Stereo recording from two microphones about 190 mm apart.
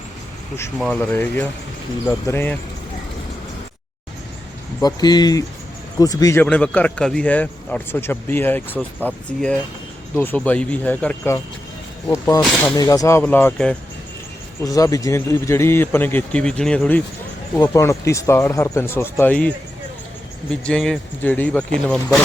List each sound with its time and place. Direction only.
0.8 s speech: 5° left (ahead or behind)
4.8 s speech: 20° left (ahead or behind)
12.4 s speech: 5° left (ahead or behind)
12.7 s speech: 20° left (ahead or behind)
14.6 s speech: 20° left (ahead or behind)